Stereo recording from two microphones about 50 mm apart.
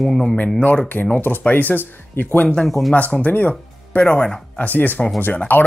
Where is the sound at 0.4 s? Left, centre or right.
Left.